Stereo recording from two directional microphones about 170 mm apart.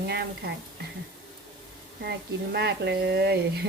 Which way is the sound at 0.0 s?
75° right (ahead or behind).